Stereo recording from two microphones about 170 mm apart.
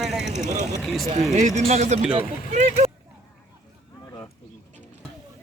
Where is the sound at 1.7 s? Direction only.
40° right (ahead or behind).